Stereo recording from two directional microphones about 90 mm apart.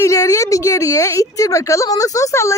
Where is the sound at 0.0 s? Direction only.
35° left (ahead or behind).